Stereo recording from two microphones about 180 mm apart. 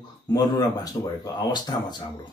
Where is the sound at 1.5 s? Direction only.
25° left (ahead or behind).